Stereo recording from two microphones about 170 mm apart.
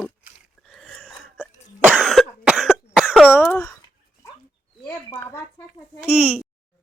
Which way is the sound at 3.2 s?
10° left (ahead or behind).